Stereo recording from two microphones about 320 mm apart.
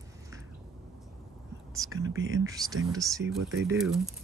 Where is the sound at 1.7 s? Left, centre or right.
Centre.